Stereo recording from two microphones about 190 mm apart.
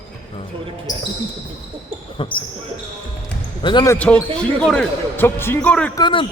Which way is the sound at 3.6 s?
20° left (ahead or behind).